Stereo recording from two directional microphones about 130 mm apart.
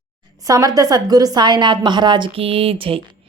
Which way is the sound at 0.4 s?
30° right (ahead or behind).